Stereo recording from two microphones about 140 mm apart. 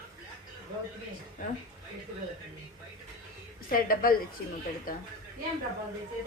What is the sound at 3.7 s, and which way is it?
A woman's voice, 90° left.